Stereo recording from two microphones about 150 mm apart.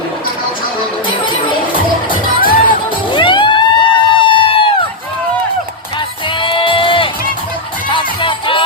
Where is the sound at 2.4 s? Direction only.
75° left (ahead or behind).